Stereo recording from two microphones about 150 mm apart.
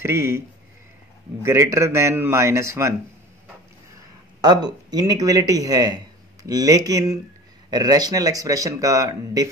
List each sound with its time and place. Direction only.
0.0 s speech: 20° right (ahead or behind)
1.4 s speech: 20° right (ahead or behind)
4.4 s speech: 30° right (ahead or behind)